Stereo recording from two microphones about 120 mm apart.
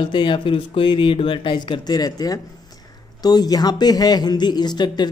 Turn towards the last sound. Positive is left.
turn(degrees=35)  # may be behind; listen again after turning